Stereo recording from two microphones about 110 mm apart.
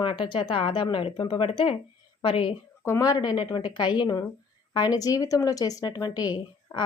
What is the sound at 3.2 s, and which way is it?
Speech, 45° left (ahead or behind).